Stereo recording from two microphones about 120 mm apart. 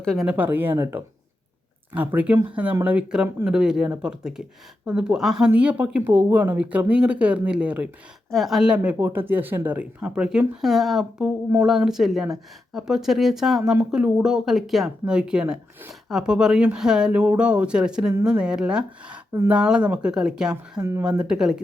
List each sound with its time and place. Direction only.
0.0 s speech: 5° left (ahead or behind)
0.3 s speech: 15° right (ahead or behind)